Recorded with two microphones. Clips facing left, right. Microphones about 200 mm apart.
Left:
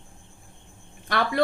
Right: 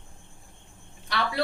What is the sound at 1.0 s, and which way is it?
Speech, 50° left (ahead or behind).